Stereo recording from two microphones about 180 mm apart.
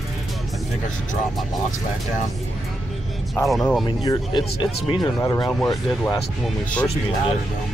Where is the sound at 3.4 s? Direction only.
Centre (ahead or behind).